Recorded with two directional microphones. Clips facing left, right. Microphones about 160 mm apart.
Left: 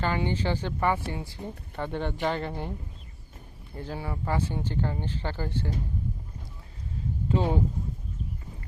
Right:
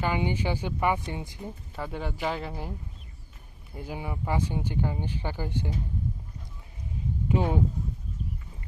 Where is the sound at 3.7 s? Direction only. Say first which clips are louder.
Left 1 dB; 10° right (ahead or behind).